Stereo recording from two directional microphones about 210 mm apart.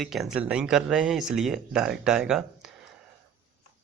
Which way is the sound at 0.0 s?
Centre (ahead or behind).